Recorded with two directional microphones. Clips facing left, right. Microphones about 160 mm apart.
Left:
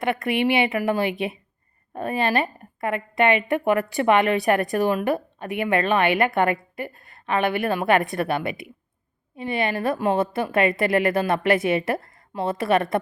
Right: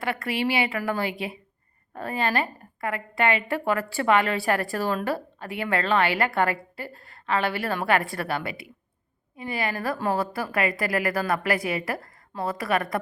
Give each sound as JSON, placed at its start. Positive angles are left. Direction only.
{"t": 0.0, "sound": "a woman's voice", "side_deg": 20}